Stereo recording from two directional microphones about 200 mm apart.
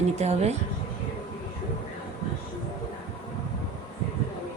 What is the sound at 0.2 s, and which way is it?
Speech, 35° right (ahead or behind).